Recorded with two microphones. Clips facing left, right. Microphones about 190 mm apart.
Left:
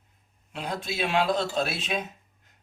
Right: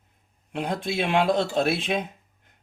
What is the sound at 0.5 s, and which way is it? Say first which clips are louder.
Speech: right 5 dB; 55° right (ahead or behind).